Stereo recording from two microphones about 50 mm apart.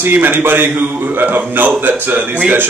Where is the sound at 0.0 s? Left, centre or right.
Right.